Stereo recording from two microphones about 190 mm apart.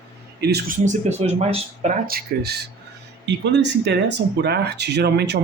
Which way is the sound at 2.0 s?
50° right (ahead or behind).